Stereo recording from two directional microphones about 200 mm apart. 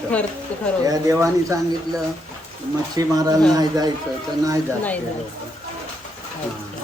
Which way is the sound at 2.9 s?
20° right (ahead or behind).